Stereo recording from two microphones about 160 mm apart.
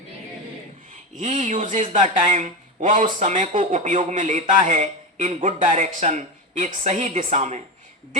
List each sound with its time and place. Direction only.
1.1 s a man's voice: 50° right (ahead or behind)